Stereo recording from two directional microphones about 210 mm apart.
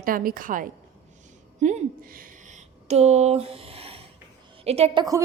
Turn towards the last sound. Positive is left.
turn(degrees=-30)  # may be behind; listen again after turning